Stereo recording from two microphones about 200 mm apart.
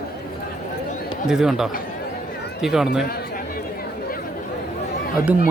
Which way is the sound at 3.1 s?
50° left (ahead or behind).